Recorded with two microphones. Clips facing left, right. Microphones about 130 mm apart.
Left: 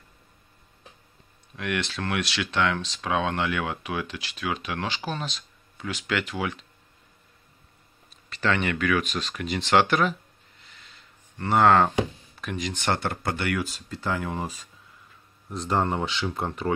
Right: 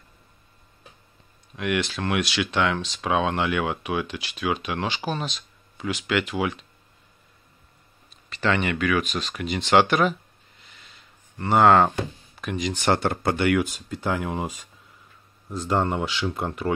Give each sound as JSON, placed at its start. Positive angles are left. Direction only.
{"t": 1.6, "sound": "speech", "side_deg": -10}
{"t": 8.3, "sound": "speech", "side_deg": -5}
{"t": 11.4, "sound": "speech", "side_deg": -5}
{"t": 12.8, "sound": "speech", "side_deg": -15}
{"t": 15.6, "sound": "speech", "side_deg": 0}